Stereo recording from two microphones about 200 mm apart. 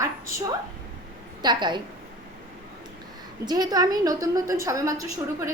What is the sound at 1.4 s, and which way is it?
Speech, 20° right (ahead or behind).